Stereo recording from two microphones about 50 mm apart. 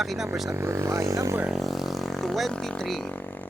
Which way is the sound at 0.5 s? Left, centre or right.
Right.